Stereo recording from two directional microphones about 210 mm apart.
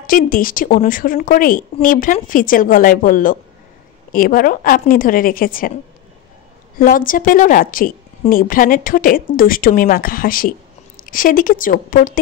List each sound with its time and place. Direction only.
0.0 s a woman's voice: 40° left (ahead or behind)
6.8 s a woman's voice: 40° left (ahead or behind)